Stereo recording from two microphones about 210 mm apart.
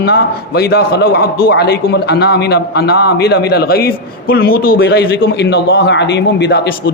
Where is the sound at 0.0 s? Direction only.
50° left (ahead or behind).